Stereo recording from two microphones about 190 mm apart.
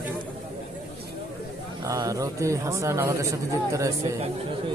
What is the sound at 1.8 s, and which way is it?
Speech, 15° right (ahead or behind).